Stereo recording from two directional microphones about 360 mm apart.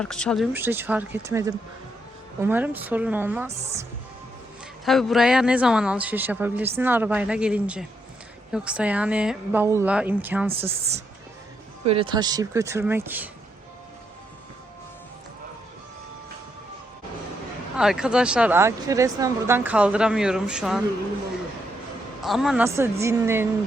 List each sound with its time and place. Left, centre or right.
0.0 s speech: centre
4.9 s speech: centre
10.5 s speech: centre
17.7 s speech: centre
22.2 s speech: centre